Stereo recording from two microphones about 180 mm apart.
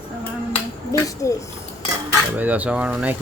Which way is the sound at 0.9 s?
15° left (ahead or behind).